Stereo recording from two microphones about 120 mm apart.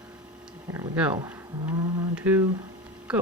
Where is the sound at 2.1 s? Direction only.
15° right (ahead or behind).